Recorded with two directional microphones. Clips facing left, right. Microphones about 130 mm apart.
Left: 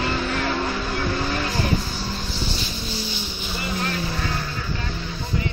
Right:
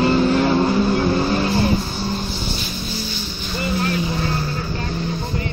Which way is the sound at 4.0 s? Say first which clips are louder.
Right 5 dB; 25° right (ahead or behind).